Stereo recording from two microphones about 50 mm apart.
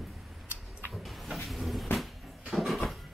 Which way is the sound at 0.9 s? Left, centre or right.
Centre.